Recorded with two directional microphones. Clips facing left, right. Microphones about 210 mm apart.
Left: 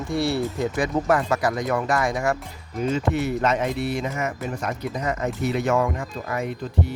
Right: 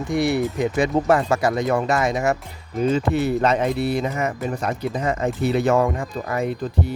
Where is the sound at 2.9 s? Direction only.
35° right (ahead or behind).